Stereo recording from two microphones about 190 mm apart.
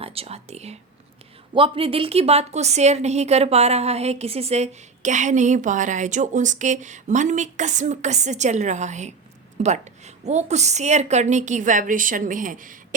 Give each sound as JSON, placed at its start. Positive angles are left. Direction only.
{"t": 0.0, "sound": "a woman's voice", "side_deg": -30}